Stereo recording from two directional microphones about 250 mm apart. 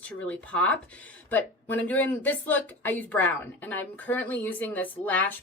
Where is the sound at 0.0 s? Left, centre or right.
Centre.